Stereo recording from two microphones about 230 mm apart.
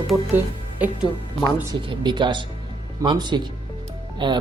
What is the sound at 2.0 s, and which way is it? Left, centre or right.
Speech, centre.